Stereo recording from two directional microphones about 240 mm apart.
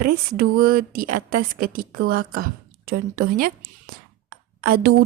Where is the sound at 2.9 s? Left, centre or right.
Right.